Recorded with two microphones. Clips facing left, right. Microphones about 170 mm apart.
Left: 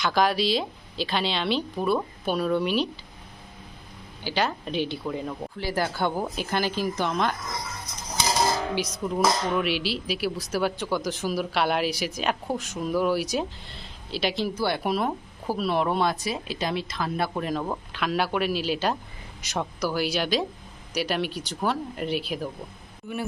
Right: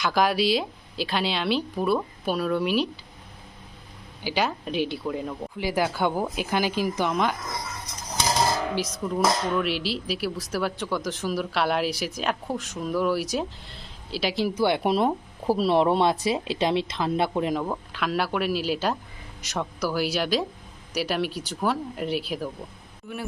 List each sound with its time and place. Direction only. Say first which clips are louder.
0.0 s speech: right 1 dB; 5° right (ahead or behind)
4.2 s speech: right 1 dB; 10° right (ahead or behind)
8.7 s speech: even; centre (ahead or behind)
14.5 s speech: right 3 dB; 20° right (ahead or behind)
17.6 s speech: right 1 dB; centre (ahead or behind)